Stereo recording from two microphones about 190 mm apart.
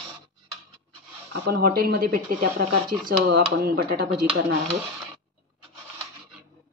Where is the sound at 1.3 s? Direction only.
55° right (ahead or behind).